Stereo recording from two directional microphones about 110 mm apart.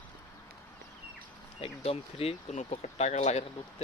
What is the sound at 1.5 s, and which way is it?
Speech, 60° left (ahead or behind).